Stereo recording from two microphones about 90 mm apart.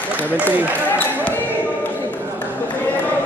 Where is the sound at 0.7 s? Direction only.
20° left (ahead or behind).